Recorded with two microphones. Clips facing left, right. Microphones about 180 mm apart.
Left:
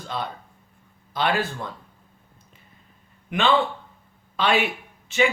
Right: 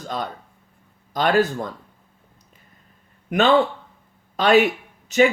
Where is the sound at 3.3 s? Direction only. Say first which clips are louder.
Right 4 dB; 40° right (ahead or behind).